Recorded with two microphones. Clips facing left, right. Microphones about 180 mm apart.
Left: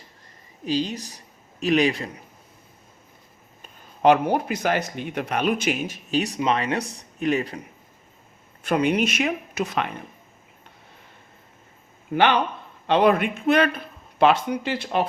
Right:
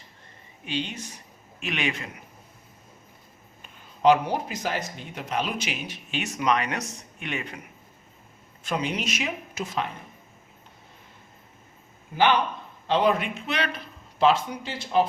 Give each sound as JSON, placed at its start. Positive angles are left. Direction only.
{"t": 0.6, "sound": "speech", "side_deg": 35}
{"t": 3.6, "sound": "speech", "side_deg": 55}
{"t": 8.6, "sound": "speech", "side_deg": 60}
{"t": 12.9, "sound": "speech", "side_deg": 60}